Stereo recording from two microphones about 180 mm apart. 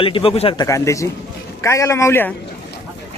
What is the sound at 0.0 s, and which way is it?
Speech, 30° left (ahead or behind).